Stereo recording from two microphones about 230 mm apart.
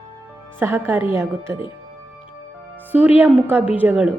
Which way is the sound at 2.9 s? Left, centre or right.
Centre.